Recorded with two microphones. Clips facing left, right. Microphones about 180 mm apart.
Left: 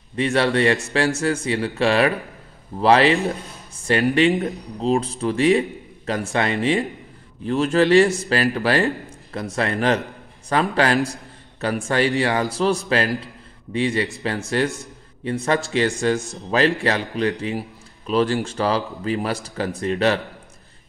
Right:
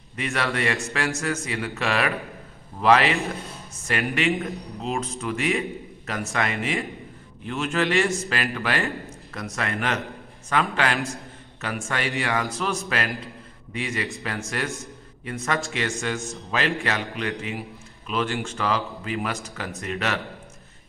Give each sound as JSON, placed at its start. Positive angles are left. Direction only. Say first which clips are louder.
{"t": 0.1, "sound": "a man's voice", "louder": "left 8 dB", "side_deg": 30}